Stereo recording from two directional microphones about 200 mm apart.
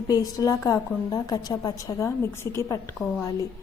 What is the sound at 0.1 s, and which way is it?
A woman's voice, 20° left (ahead or behind).